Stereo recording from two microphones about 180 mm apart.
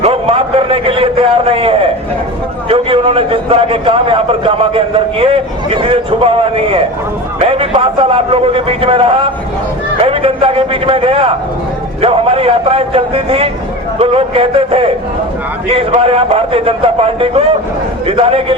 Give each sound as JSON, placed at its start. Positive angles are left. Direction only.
{"t": 0.0, "sound": "a man's voice", "side_deg": -30}